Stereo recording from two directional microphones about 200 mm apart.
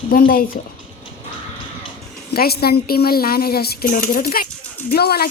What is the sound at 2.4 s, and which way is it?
A woman's voice, 50° left (ahead or behind).